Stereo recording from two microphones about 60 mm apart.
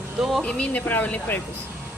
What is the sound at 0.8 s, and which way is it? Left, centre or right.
Speech, left.